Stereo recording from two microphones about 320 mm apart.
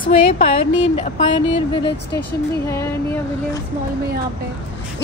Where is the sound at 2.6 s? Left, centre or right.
Centre.